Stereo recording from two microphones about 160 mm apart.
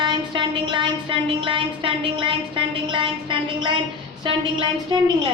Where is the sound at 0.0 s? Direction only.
30° right (ahead or behind).